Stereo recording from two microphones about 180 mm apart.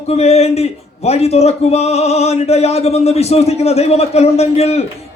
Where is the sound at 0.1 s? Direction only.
35° left (ahead or behind).